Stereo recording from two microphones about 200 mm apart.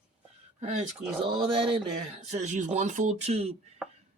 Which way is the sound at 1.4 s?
30° right (ahead or behind).